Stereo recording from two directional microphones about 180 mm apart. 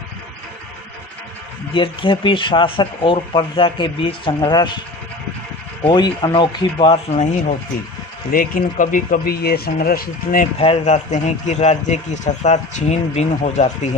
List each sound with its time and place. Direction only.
1.7 s speech: 30° left (ahead or behind)
5.8 s speech: 25° left (ahead or behind)
8.3 s speech: 50° left (ahead or behind)
10.6 s speech: 35° left (ahead or behind)